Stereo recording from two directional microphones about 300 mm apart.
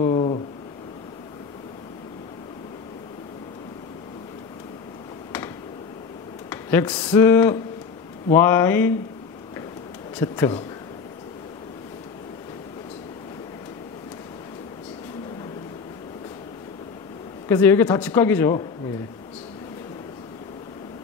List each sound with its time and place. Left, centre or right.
0.0 s a sound: centre
6.5 s speech: centre
10.1 s speech: centre
17.5 s speech: centre